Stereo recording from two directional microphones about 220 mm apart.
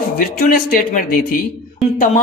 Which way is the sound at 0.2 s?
40° left (ahead or behind).